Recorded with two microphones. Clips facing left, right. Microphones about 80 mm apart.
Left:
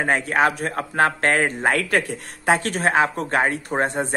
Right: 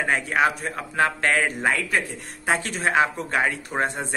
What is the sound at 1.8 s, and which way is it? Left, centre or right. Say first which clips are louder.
Speech: left 4 dB; left.